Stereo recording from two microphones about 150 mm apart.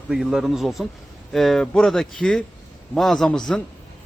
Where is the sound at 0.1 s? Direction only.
Centre (ahead or behind).